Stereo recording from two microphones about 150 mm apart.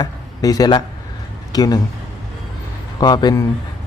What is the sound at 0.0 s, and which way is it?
Speech, 25° left (ahead or behind).